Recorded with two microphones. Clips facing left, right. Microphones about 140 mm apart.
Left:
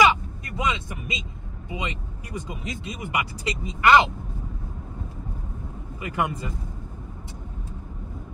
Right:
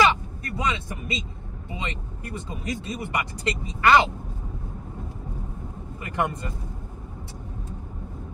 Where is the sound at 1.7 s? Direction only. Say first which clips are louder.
Left 2 dB; 15° left (ahead or behind).